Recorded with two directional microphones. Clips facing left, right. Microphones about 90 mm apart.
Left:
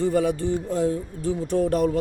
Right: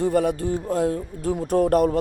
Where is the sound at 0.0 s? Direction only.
55° right (ahead or behind).